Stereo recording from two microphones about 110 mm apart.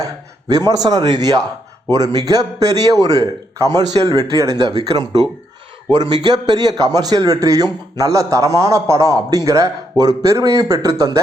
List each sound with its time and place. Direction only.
0.0 s a man's voice: 35° right (ahead or behind)